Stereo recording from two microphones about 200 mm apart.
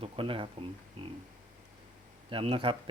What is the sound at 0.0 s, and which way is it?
Speech, 25° right (ahead or behind).